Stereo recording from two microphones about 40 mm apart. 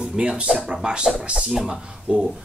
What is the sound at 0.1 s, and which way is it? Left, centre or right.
Speech, centre.